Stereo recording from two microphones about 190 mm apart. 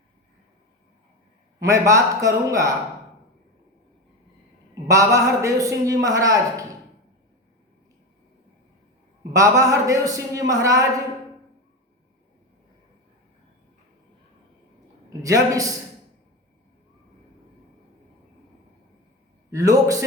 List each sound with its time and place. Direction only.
1.6 s a man's voice: 15° right (ahead or behind)
4.7 s a man's voice: 15° right (ahead or behind)
9.3 s a man's voice: 15° right (ahead or behind)
15.2 s a man's voice: 20° right (ahead or behind)
19.5 s a man's voice: 15° right (ahead or behind)